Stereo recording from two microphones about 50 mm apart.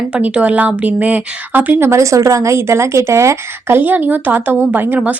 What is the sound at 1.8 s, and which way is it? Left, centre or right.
A woman's voice, right.